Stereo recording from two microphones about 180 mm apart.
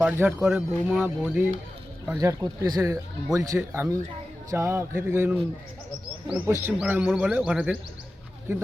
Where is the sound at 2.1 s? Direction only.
20° right (ahead or behind).